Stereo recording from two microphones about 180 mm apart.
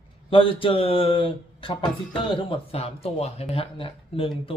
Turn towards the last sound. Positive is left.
turn(degrees=30)  # may be behind; listen again after turning